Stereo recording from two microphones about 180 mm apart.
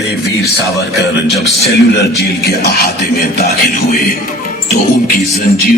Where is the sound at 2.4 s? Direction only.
65° left (ahead or behind).